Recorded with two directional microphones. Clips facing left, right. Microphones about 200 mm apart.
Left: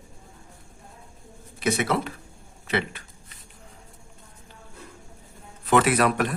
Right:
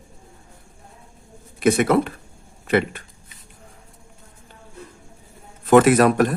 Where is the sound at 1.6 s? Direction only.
50° right (ahead or behind).